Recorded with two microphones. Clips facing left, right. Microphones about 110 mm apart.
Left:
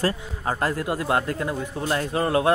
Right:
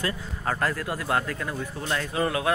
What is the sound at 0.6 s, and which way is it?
Speech, 25° left (ahead or behind).